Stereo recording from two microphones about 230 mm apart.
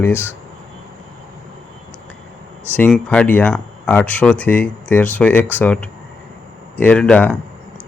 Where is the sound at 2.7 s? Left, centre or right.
Centre.